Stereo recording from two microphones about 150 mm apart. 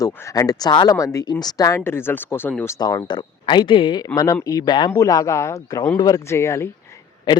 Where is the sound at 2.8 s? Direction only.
30° left (ahead or behind).